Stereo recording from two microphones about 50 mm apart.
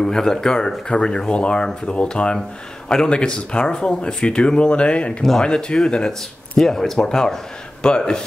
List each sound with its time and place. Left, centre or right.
0.0 s speech: centre